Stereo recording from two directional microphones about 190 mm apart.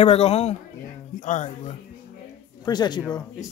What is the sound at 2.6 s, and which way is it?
Speech, 20° left (ahead or behind).